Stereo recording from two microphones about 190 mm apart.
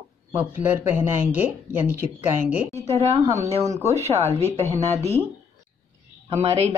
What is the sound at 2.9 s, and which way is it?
Speech, 35° right (ahead or behind).